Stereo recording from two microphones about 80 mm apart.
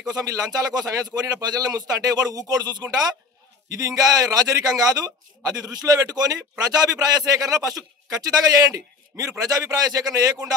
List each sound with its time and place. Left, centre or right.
0.1 s speech: right